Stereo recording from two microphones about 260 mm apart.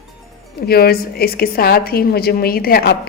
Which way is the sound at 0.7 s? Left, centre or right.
Left.